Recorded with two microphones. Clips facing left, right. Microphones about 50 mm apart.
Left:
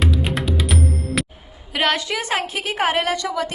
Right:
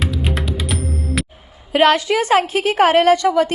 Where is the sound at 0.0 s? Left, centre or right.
Centre.